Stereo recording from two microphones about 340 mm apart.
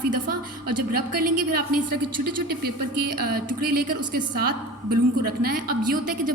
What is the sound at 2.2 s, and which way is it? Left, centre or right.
Speech, right.